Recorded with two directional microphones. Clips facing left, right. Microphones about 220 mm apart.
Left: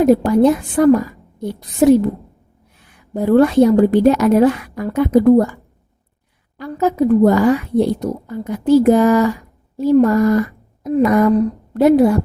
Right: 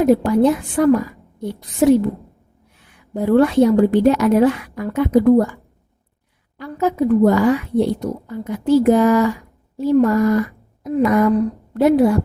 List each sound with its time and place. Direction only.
0.0 s speech: 40° left (ahead or behind)
3.2 s speech: 40° left (ahead or behind)
6.6 s speech: 40° left (ahead or behind)